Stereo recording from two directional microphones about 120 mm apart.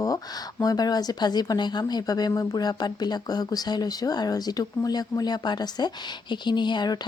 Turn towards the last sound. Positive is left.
turn(degrees=40)  # may be behind; listen again after turning